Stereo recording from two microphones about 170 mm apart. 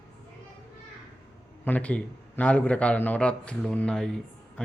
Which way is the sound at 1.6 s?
10° left (ahead or behind).